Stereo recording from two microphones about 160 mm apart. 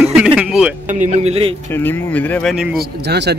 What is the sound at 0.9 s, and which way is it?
Speech, 50° right (ahead or behind).